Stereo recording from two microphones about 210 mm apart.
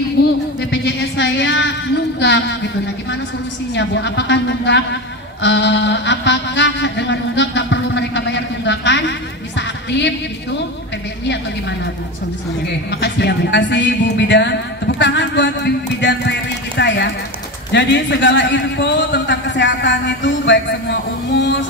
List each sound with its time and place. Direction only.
0.7 s a sound: 55° left (ahead or behind)
3.7 s a man's voice: 60° left (ahead or behind)
5.4 s a sound: 60° left (ahead or behind)
9.6 s music: 55° left (ahead or behind)
13.0 s music: 55° left (ahead or behind)
17.7 s a man's voice: 55° left (ahead or behind)